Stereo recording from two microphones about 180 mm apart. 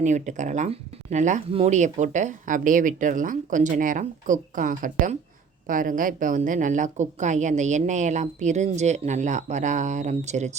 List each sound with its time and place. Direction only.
0.0 s a woman's voice: 40° right (ahead or behind)